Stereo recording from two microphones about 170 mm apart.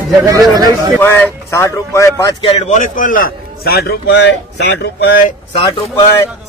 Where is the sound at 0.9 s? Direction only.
10° left (ahead or behind).